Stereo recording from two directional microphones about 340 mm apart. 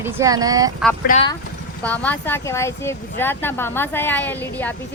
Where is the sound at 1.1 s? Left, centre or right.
Centre.